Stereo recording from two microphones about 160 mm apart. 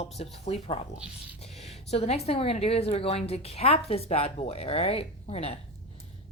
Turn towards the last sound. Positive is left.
turn(degrees=40)  # may be behind; listen again after turning